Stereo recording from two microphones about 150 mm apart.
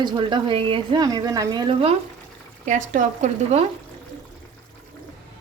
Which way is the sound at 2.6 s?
55° right (ahead or behind).